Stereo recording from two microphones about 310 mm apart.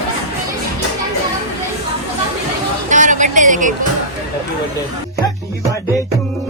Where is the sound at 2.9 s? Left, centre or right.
Right.